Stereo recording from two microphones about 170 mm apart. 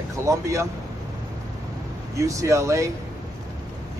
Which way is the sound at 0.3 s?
20° right (ahead or behind).